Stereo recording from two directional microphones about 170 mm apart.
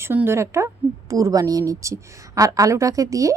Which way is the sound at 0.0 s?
10° right (ahead or behind).